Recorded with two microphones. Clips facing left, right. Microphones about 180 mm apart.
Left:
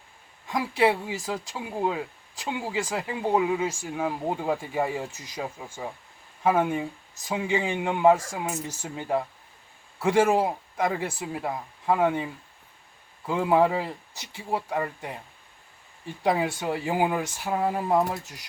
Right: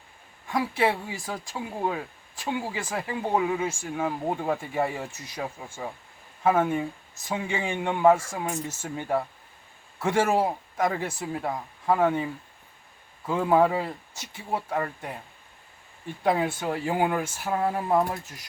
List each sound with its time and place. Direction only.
0.4 s speech: 15° left (ahead or behind)
6.4 s speech: 15° left (ahead or behind)
16.2 s speech: 15° left (ahead or behind)